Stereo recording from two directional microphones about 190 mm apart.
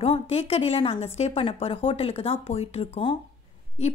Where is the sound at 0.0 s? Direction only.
30° left (ahead or behind).